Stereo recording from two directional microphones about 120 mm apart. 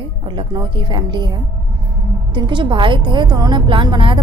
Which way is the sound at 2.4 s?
40° right (ahead or behind).